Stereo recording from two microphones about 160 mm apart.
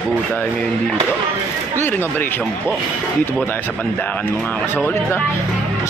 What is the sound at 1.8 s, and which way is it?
Speech, 10° left (ahead or behind).